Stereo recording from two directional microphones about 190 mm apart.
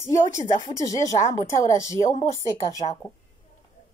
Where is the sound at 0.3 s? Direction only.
20° left (ahead or behind).